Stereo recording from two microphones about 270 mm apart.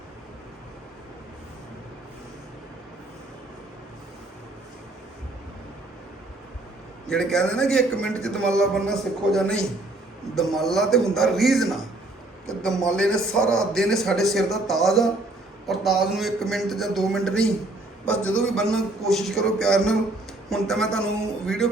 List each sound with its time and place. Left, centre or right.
7.1 s a man's voice: centre